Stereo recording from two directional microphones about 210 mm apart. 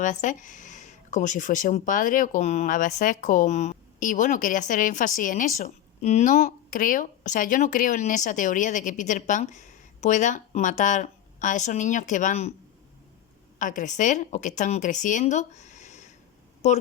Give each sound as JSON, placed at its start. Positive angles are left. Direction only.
{"t": 0.0, "sound": "speech", "side_deg": 35}
{"t": 13.6, "sound": "speech", "side_deg": 40}